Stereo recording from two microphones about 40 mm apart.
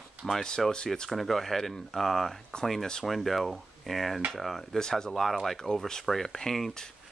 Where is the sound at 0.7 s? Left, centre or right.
Centre.